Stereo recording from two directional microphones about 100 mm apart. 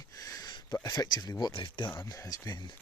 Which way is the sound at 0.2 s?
35° left (ahead or behind).